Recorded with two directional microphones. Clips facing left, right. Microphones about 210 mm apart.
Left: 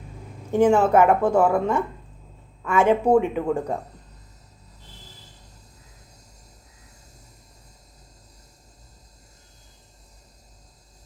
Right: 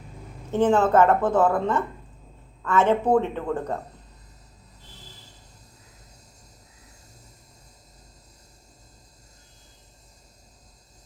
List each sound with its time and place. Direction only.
0.5 s a woman's voice: 10° left (ahead or behind)